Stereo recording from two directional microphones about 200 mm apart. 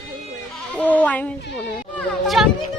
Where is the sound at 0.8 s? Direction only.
10° left (ahead or behind).